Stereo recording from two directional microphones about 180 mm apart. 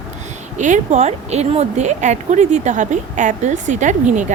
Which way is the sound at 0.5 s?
40° right (ahead or behind).